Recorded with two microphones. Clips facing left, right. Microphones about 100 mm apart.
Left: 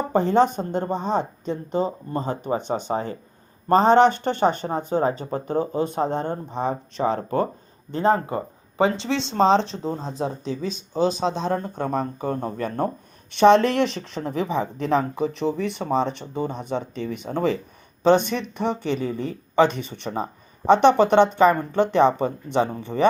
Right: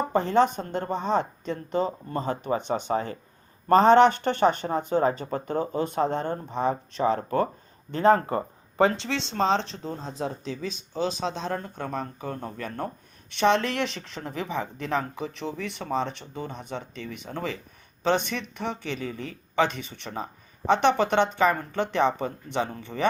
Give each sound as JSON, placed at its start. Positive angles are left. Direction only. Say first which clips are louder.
{"t": 0.1, "sound": "speech", "louder": "left 4 dB", "side_deg": 20}
{"t": 9.0, "sound": "speech", "louder": "left 6 dB", "side_deg": 25}
{"t": 14.2, "sound": "speech", "louder": "left 7 dB", "side_deg": 40}
{"t": 14.4, "sound": "speech", "louder": "left 5 dB", "side_deg": 25}
{"t": 14.8, "sound": "speech", "louder": "left 9 dB", "side_deg": 35}